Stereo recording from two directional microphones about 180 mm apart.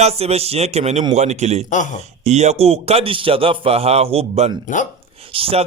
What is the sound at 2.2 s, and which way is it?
Speech, 40° right (ahead or behind).